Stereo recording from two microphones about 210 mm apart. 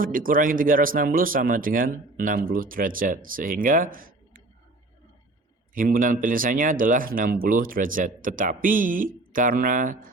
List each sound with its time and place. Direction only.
0.0 s speech: 40° right (ahead or behind)
5.7 s speech: 40° right (ahead or behind)